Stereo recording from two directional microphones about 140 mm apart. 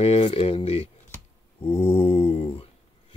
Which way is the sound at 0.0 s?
45° left (ahead or behind).